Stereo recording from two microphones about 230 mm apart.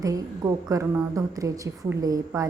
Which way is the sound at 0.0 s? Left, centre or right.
Centre.